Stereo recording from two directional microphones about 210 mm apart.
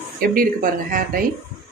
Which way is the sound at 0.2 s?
40° right (ahead or behind).